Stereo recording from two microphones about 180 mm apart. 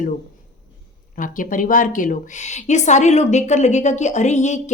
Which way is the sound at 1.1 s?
50° left (ahead or behind).